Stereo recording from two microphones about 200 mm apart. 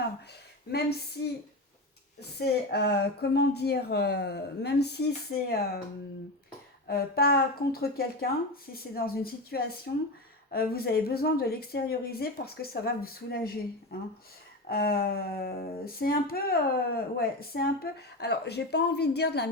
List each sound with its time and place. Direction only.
0.7 s a woman's voice: 55° left (ahead or behind)
6.8 s speech: 50° left (ahead or behind)
14.7 s a woman's voice: 50° left (ahead or behind)